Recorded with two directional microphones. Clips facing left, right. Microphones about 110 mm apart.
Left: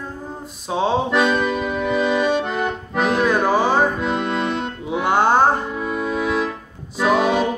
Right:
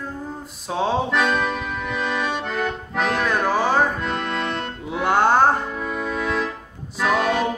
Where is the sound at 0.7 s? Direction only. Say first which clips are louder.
Left 3 dB; 5° left (ahead or behind).